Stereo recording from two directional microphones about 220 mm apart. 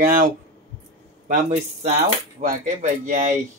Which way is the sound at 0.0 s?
35° right (ahead or behind).